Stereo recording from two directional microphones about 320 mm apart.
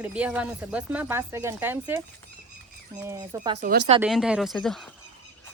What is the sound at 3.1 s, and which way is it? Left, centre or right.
Speech, centre.